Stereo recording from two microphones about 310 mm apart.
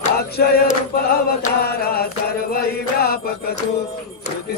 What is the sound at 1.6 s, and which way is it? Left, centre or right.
Mantra, left.